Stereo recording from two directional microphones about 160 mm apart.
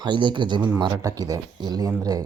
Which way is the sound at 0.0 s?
30° right (ahead or behind).